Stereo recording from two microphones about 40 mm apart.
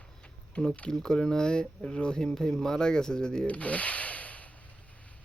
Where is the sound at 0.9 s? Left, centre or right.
Centre.